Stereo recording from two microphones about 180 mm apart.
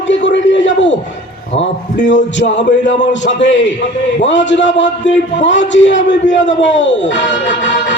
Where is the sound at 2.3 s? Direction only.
80° left.